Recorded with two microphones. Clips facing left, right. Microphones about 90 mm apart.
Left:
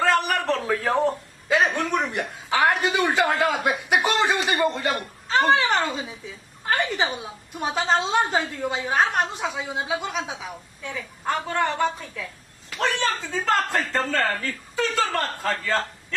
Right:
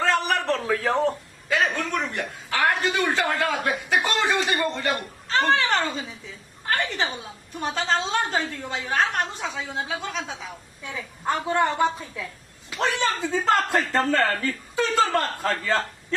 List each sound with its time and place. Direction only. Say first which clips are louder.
0.0 s a sound: left 1 dB; centre (ahead or behind)
1.5 s a woman's voice: left 3 dB; 20° left (ahead or behind)
10.8 s a woman's voice: even; 20° right (ahead or behind)